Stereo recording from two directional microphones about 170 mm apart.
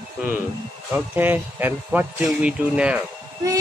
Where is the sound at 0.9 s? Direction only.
10° right (ahead or behind).